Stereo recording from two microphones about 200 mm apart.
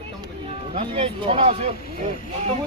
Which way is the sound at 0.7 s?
30° right (ahead or behind).